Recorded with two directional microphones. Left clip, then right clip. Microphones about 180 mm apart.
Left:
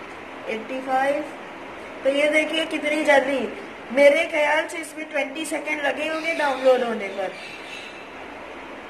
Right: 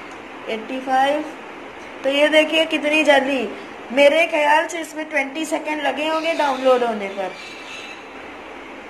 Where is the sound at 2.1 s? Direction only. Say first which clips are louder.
Right 6 dB; 25° right (ahead or behind).